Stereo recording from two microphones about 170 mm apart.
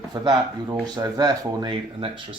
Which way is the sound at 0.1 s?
25° right (ahead or behind).